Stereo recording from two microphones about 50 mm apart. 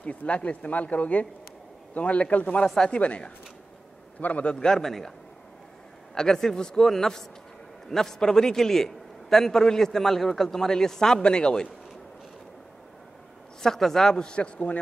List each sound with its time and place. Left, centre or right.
0.0 s a man's voice: left
3.0 s speech: left
4.6 s a man's voice: centre
6.1 s a man's voice: centre
13.6 s a man's voice: centre